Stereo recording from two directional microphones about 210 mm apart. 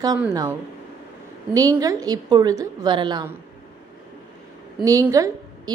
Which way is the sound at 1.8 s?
15° right (ahead or behind).